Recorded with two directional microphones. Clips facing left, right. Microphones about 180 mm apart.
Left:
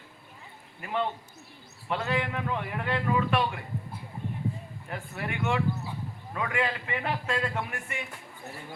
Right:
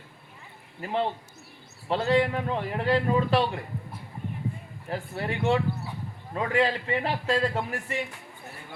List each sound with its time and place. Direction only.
0.8 s a man's voice: 30° right (ahead or behind)
4.9 s a man's voice: 30° right (ahead or behind)